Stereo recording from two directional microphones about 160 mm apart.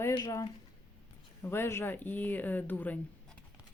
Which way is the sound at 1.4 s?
15° left (ahead or behind).